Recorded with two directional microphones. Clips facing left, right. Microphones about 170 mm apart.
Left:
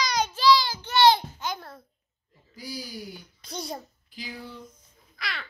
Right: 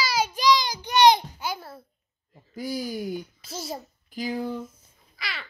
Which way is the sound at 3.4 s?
5° right (ahead or behind).